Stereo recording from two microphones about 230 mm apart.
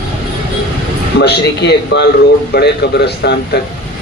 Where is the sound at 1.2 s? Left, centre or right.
Left.